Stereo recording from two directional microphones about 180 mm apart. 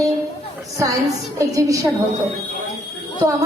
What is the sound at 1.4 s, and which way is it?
Speech, 20° right (ahead or behind).